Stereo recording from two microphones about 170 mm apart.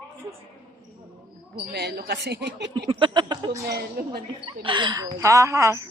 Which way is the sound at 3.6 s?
65° right (ahead or behind).